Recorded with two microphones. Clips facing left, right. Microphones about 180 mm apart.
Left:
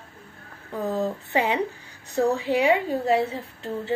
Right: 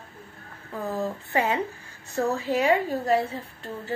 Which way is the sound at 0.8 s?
15° left (ahead or behind).